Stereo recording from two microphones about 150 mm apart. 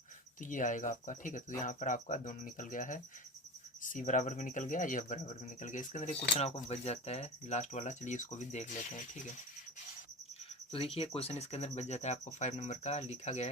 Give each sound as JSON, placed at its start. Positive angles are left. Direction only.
{"t": 0.4, "sound": "speech", "side_deg": 60}
{"t": 10.9, "sound": "speech", "side_deg": 40}